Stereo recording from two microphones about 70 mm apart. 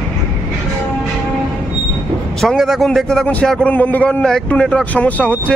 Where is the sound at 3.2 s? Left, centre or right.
Centre.